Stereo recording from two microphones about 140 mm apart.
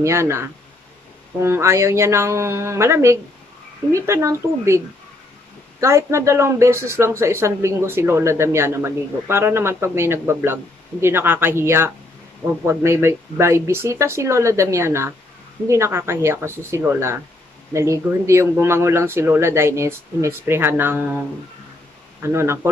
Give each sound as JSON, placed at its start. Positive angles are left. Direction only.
{"t": 0.0, "sound": "speech", "side_deg": -20}
{"t": 22.2, "sound": "speech", "side_deg": -20}